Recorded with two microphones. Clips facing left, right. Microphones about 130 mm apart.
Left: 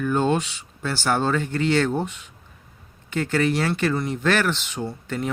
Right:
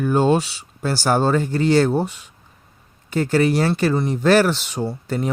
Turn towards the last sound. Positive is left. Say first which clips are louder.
# right 4 dB
turn(degrees=-35)  # may be behind; listen again after turning